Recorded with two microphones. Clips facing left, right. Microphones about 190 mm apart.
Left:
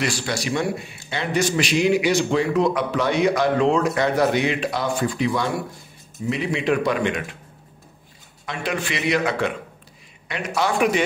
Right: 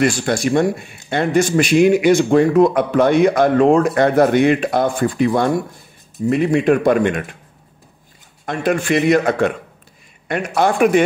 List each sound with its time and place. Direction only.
0.0 s a man's voice: 50° right (ahead or behind)
8.5 s a man's voice: 50° right (ahead or behind)